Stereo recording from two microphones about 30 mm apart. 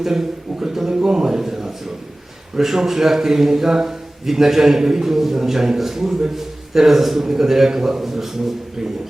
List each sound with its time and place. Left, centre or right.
0.0 s a man's voice: centre